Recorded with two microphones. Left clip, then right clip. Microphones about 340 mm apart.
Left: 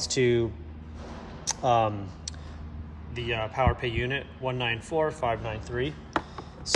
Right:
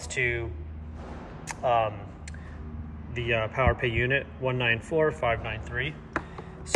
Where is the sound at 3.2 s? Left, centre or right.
Centre.